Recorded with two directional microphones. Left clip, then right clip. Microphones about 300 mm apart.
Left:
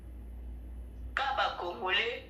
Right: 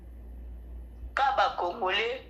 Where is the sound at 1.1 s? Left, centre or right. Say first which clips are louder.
Right 6 dB; centre.